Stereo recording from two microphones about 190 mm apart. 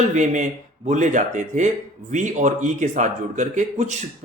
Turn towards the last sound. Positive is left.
turn(degrees=-40)  # may be behind; listen again after turning